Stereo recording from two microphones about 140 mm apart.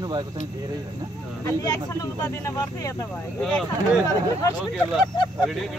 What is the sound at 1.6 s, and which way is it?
Speech, 25° left (ahead or behind).